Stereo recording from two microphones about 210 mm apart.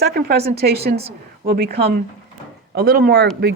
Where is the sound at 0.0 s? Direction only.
50° right (ahead or behind).